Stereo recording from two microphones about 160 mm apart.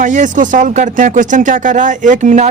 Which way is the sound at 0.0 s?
50° right (ahead or behind).